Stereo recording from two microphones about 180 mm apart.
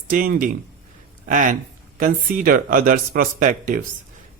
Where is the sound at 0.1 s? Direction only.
50° right (ahead or behind).